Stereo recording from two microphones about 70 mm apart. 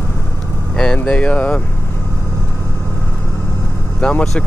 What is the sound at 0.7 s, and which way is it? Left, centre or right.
Speech, centre.